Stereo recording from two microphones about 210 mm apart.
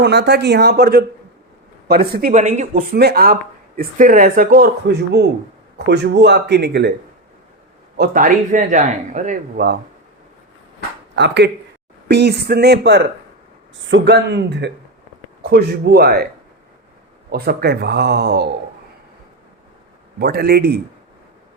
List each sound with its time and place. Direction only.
0.0 s a man's voice: 55° right (ahead or behind)
7.9 s speech: 45° right (ahead or behind)
11.1 s a man's voice: 55° right (ahead or behind)
20.1 s a man's voice: 50° right (ahead or behind)